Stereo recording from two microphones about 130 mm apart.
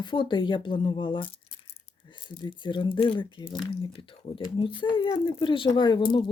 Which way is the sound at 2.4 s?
40° left (ahead or behind).